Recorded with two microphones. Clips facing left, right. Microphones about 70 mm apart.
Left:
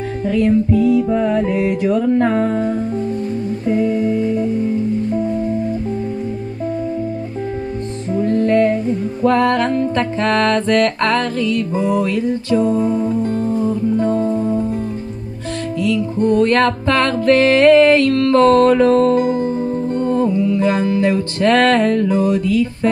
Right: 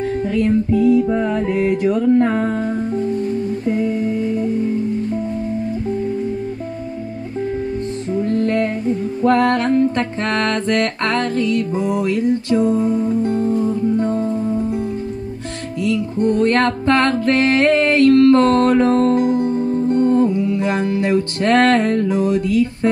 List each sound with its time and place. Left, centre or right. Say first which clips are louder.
0.3 s music: left 4 dB; right
9.2 s music: left 1 dB; right
12.0 s music: right 1 dB; right
16.3 s music: left 2 dB; right